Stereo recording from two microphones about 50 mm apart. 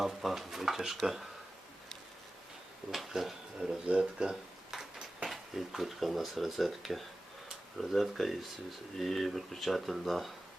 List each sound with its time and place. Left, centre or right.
0.0 s speech: centre
2.9 s speech: centre
5.3 s speech: centre